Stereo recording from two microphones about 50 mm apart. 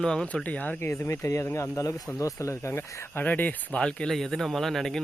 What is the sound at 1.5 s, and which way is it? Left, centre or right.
Speech, left.